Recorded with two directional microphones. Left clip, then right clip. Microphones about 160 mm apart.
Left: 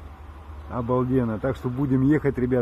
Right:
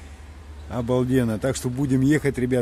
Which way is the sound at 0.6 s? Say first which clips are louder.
Right 1 dB; 40° right (ahead or behind).